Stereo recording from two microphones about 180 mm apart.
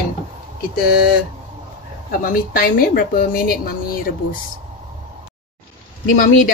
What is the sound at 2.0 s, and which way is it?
Speech, 50° left (ahead or behind).